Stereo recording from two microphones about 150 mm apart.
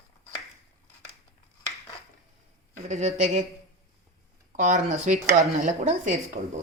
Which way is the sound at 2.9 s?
50° right (ahead or behind).